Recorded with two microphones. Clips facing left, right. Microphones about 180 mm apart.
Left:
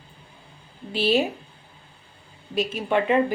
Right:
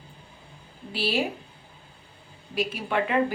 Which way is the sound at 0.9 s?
20° left (ahead or behind).